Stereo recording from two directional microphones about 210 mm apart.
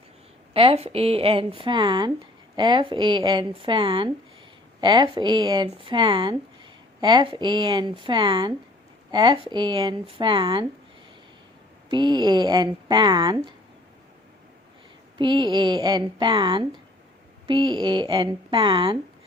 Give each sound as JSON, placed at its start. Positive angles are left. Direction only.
{"t": 0.5, "sound": "speech", "side_deg": -25}
{"t": 11.9, "sound": "speech", "side_deg": -20}
{"t": 15.2, "sound": "speech", "side_deg": -20}